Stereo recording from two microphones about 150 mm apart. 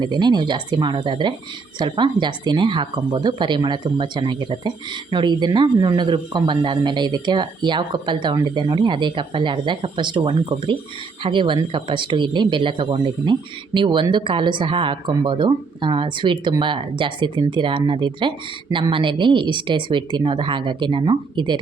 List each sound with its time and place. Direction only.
0.0 s speech: 30° right (ahead or behind)